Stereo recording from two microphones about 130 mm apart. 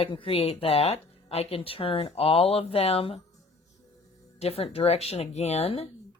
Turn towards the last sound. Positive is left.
turn(degrees=50)  # may be behind; listen again after turning